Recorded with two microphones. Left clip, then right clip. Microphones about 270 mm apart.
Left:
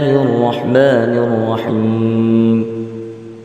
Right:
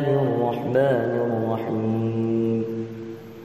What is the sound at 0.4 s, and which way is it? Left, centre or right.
Mantra, left.